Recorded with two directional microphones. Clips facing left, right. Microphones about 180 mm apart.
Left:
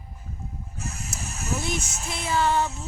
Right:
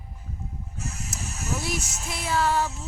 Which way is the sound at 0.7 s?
55° left (ahead or behind).